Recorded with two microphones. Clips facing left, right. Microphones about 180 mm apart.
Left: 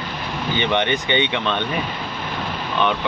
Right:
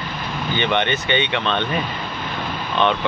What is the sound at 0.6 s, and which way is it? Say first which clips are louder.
Speech: even; 15° left (ahead or behind).